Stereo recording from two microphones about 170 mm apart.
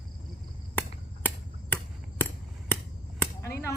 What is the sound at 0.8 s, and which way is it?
Finger snapping, 10° left (ahead or behind).